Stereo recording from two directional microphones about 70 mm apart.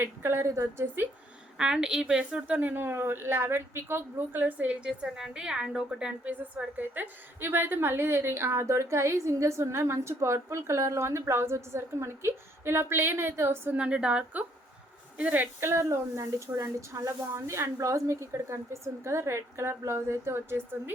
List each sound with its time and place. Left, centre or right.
0.0 s a woman's voice: right
1.5 s a woman's voice: centre
6.7 s a woman's voice: right
13.7 s a woman's voice: centre
15.7 s speech: right